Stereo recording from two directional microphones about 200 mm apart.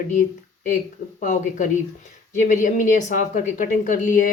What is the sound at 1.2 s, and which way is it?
A woman's voice, 40° left (ahead or behind).